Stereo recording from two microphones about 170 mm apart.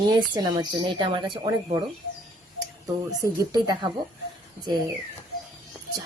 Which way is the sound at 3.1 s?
20° right (ahead or behind).